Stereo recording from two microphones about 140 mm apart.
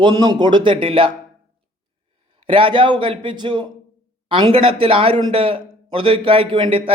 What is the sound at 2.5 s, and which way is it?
A man's voice, 35° right (ahead or behind).